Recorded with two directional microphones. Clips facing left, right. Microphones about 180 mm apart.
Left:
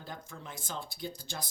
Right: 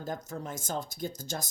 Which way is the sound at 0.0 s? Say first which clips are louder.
Right 8 dB; 45° right (ahead or behind).